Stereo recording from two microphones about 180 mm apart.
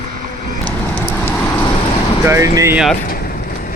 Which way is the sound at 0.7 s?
5° left (ahead or behind).